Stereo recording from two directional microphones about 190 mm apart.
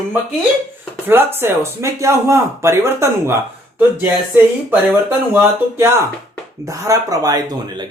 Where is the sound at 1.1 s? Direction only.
10° right (ahead or behind).